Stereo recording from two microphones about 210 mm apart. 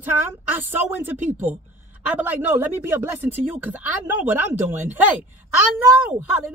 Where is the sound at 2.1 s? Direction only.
10° right (ahead or behind).